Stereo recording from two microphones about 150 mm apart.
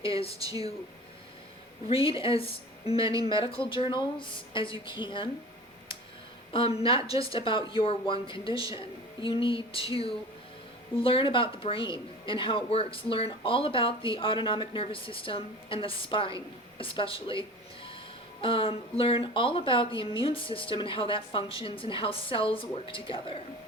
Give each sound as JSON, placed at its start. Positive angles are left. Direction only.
{"t": 0.0, "sound": "speech", "side_deg": 40}
{"t": 0.3, "sound": "speech", "side_deg": -25}
{"t": 1.9, "sound": "speech", "side_deg": 40}
{"t": 6.5, "sound": "speech", "side_deg": 40}
{"t": 10.9, "sound": "speech", "side_deg": 35}
{"t": 18.4, "sound": "speech", "side_deg": 35}